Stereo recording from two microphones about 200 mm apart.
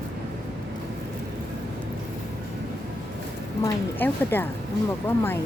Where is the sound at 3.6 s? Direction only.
10° left (ahead or behind).